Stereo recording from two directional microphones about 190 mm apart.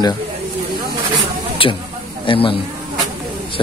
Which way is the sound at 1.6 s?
30° left (ahead or behind).